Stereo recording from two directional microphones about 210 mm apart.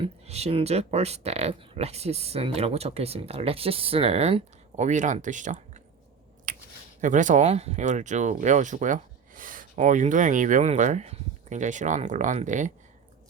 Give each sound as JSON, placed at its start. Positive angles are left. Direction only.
{"t": 0.0, "sound": "speech", "side_deg": -30}
{"t": 6.5, "sound": "a sound", "side_deg": -40}
{"t": 7.0, "sound": "speech", "side_deg": -35}